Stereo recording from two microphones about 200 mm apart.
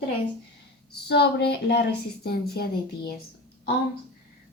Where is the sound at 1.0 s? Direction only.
55° left (ahead or behind).